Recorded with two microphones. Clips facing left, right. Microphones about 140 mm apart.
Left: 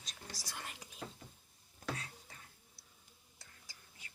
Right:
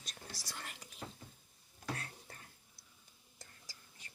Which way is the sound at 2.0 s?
55° right (ahead or behind).